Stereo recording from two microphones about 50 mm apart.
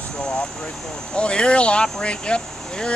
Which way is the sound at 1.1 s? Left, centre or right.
Left.